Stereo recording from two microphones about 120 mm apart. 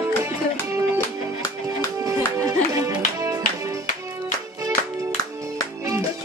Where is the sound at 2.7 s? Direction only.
25° right (ahead or behind).